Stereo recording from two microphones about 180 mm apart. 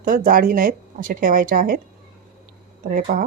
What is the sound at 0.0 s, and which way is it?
Speech, 50° right (ahead or behind).